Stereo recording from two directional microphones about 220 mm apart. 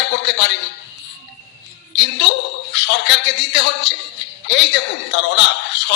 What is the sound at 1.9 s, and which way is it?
A man's voice, 55° left (ahead or behind).